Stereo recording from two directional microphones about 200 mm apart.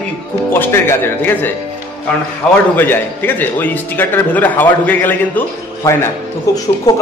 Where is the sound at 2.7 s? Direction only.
10° left (ahead or behind).